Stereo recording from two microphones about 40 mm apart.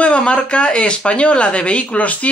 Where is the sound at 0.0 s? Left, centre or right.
Left.